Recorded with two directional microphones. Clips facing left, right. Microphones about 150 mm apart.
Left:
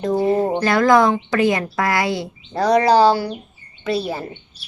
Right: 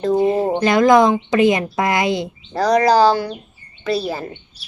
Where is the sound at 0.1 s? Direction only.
20° right (ahead or behind).